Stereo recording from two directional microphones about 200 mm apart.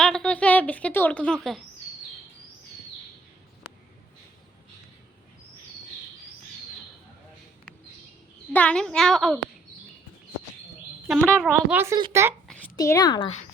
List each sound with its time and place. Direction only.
0.0 s speech: 5° left (ahead or behind)
8.5 s a child's voice: 5° left (ahead or behind)
11.1 s a child's voice: centre (ahead or behind)
11.9 s speech: 20° right (ahead or behind)
12.7 s a woman's voice: 20° left (ahead or behind)